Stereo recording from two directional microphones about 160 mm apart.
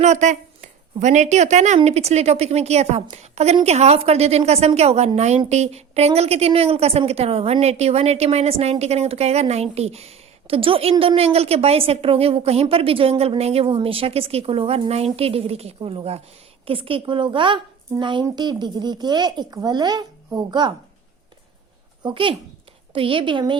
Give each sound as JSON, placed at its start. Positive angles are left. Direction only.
{"t": 0.0, "sound": "a woman's voice", "side_deg": -50}
{"t": 22.0, "sound": "a woman's voice", "side_deg": -30}